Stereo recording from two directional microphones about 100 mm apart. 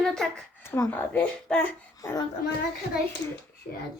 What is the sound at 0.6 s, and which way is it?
Speech, 25° left (ahead or behind).